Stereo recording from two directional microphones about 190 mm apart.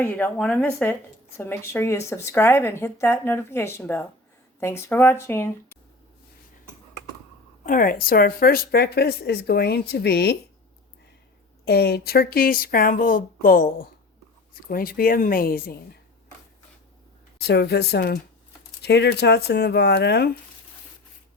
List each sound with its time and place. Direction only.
0.0 s speech: 10° left (ahead or behind)
7.6 s speech: 45° left (ahead or behind)
11.6 s speech: 55° left (ahead or behind)
17.3 s speech: 60° left (ahead or behind)